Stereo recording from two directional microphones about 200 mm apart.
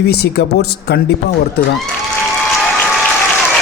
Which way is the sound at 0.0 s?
55° left (ahead or behind).